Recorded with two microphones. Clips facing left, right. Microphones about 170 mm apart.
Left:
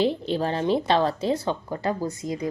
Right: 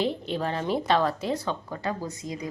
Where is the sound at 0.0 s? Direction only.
30° left (ahead or behind).